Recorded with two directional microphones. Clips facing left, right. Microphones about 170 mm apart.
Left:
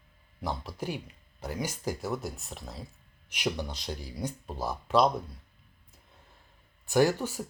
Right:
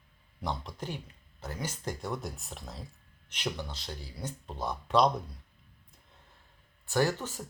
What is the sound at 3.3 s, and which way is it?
Speech, 15° left (ahead or behind).